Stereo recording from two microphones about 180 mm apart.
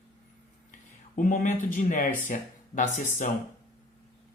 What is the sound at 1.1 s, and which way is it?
A man's voice, 45° left (ahead or behind).